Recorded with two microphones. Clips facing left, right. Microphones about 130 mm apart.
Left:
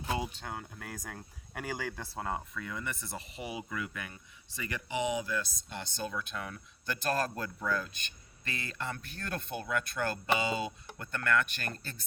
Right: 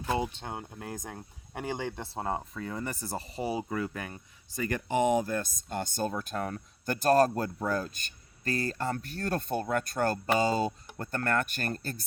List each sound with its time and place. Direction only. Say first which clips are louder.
0.1 s speech: right 4 dB; 25° right (ahead or behind); by 12.0 s 45° right (ahead or behind)